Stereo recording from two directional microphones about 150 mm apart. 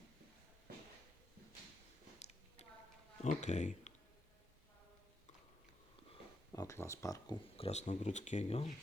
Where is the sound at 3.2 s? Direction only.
50° left (ahead or behind).